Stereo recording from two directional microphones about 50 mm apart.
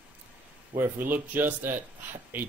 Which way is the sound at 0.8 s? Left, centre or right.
Right.